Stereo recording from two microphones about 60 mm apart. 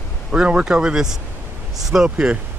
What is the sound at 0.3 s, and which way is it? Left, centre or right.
Speech, centre.